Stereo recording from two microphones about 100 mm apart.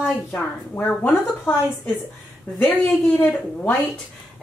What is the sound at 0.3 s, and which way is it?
Speech, 15° left (ahead or behind).